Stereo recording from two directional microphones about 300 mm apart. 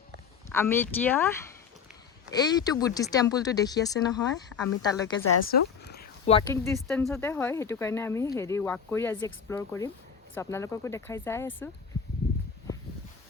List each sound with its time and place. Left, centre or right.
0.5 s speech: centre
5.2 s speech: left
5.5 s a sound: left
6.3 s speech: centre